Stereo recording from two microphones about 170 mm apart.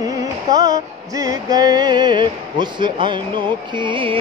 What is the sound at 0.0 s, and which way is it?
Music, 20° right (ahead or behind).